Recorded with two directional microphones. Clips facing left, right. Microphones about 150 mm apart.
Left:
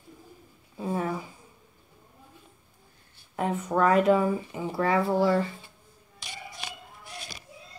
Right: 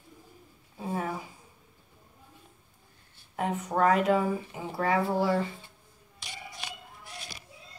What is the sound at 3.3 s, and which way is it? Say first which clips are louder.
Speech: left 2 dB; centre (ahead or behind).